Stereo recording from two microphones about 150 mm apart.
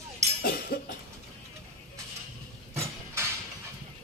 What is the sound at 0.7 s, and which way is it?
Cough, 85° left.